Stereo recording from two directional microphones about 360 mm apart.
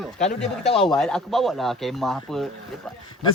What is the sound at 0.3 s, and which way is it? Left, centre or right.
Speech, centre.